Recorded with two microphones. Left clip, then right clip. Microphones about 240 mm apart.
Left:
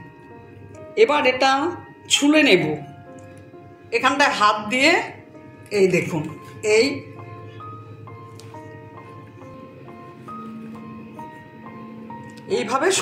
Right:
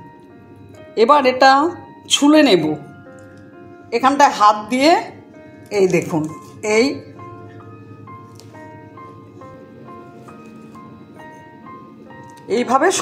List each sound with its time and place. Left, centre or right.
0.9 s a woman's voice: right
3.9 s a woman's voice: right
12.4 s a woman's voice: right